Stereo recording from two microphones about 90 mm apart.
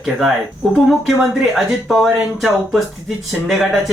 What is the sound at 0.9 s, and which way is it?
Speech, centre (ahead or behind).